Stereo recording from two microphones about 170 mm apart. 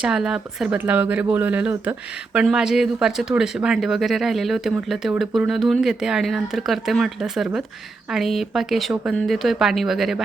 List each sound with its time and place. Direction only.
0.0 s speech: 5° right (ahead or behind)